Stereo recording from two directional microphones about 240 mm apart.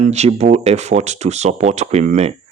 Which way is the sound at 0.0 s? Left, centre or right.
Right.